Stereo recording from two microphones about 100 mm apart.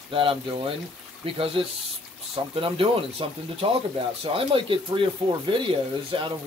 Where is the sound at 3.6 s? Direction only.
70° right (ahead or behind).